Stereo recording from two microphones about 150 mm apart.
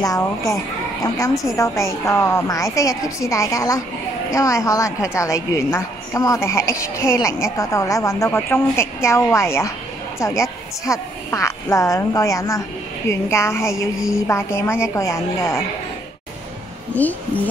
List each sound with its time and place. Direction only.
0.0 s a woman's voice: 20° left (ahead or behind)
16.9 s a woman's voice: 10° left (ahead or behind)